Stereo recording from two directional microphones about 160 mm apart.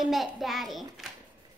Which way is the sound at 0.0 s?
Centre (ahead or behind).